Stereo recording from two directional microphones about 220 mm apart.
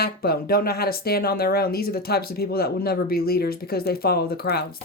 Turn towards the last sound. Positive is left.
turn(degrees=45)  # may be behind; listen again after turning